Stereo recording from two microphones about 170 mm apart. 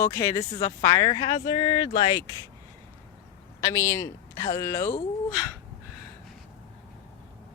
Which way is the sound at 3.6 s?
15° left (ahead or behind).